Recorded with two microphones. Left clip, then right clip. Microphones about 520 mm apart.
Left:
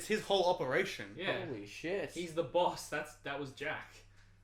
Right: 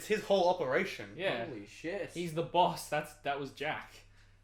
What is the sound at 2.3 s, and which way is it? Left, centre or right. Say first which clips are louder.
A man's voice: right 3 dB; right.